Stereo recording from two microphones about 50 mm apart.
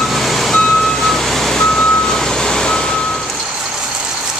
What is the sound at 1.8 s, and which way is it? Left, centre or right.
Reversing beeps, centre.